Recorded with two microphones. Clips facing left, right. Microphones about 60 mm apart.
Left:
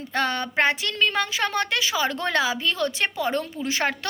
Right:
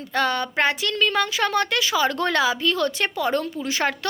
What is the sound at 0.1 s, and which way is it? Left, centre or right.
A woman's voice, left.